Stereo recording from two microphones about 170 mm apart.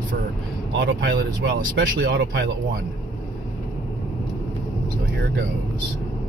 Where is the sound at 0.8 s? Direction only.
65° right (ahead or behind); by 2.5 s 85° right.